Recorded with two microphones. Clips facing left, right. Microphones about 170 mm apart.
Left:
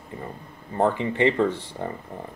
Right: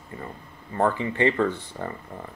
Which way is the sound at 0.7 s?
20° left (ahead or behind).